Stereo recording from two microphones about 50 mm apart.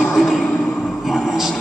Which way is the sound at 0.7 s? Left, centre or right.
Centre.